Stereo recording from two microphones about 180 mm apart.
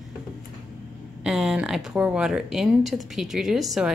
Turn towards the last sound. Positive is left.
turn(degrees=0)  # may be behind; listen again after turning